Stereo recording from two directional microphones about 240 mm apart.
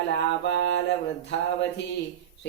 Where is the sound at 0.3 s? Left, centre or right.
Left.